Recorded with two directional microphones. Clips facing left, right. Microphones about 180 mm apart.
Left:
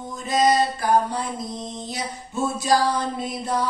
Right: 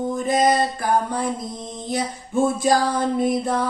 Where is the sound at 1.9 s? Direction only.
55° right (ahead or behind).